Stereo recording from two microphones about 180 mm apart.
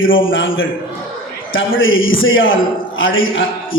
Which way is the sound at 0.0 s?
90° left.